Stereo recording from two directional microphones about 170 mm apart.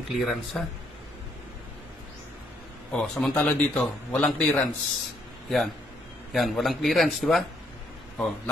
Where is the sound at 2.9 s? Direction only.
Centre (ahead or behind).